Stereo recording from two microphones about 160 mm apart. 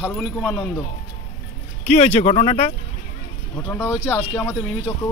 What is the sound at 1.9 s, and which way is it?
Speech, 45° left (ahead or behind).